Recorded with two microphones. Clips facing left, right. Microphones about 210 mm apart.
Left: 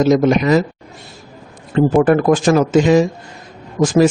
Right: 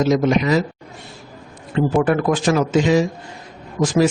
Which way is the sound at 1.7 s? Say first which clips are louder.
Left 5 dB; 45° left (ahead or behind).